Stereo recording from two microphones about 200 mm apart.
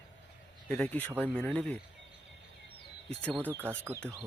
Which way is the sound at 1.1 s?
10° right (ahead or behind).